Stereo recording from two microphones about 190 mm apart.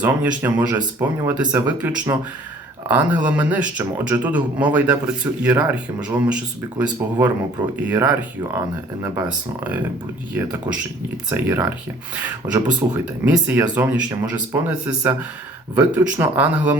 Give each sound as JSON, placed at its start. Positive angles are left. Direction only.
{"t": 0.0, "sound": "speech", "side_deg": -10}
{"t": 11.3, "sound": "speech", "side_deg": -10}